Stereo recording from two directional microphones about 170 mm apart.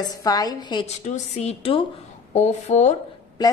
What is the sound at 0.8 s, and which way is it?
Speech, 45° left (ahead or behind).